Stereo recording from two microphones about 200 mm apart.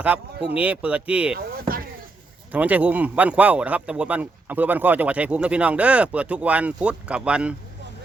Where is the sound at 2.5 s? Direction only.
5° right (ahead or behind).